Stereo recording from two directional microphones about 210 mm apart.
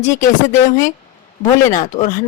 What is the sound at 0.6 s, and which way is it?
A woman's voice, 35° left (ahead or behind).